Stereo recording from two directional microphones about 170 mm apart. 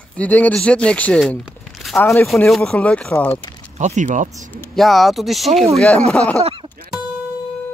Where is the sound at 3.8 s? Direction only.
45° right (ahead or behind).